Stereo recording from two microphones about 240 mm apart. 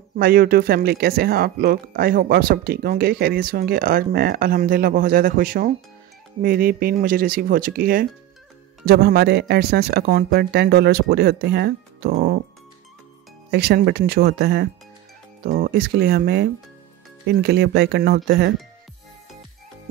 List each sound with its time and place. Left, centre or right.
0.2 s speech: right
13.5 s speech: right